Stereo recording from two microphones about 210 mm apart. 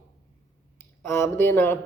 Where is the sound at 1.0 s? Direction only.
10° left (ahead or behind).